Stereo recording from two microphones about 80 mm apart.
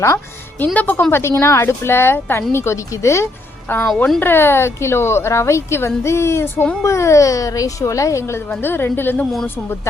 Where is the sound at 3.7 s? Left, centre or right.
Left.